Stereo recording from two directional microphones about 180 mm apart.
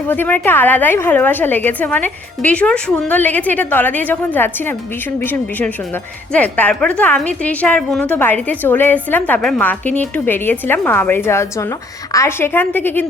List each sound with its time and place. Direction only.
0.1 s a woman's voice: 10° left (ahead or behind)